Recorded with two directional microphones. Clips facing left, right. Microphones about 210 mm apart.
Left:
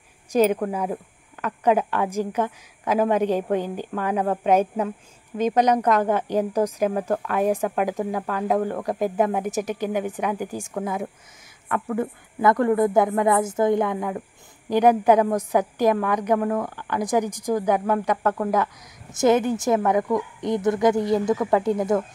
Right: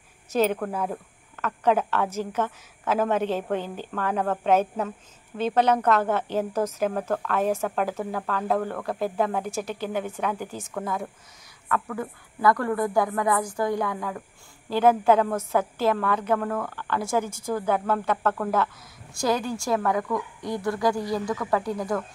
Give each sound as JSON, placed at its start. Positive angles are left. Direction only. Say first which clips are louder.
{"t": 0.3, "sound": "a woman's voice", "louder": "left 4 dB", "side_deg": 10}